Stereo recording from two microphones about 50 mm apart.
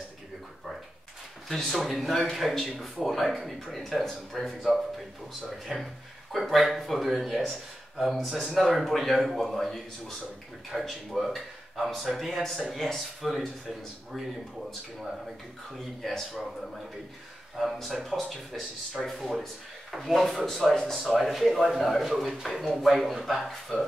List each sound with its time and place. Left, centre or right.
1.5 s speech: centre
5.7 s speech: centre
6.3 s speech: centre
16.0 s speech: centre
17.6 s speech: centre